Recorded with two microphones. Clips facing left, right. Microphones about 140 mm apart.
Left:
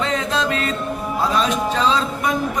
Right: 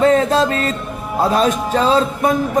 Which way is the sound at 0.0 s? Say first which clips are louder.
Right 8 dB; 40° right (ahead or behind).